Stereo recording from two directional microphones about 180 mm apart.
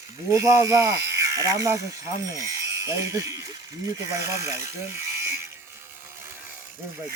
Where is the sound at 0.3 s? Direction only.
15° right (ahead or behind).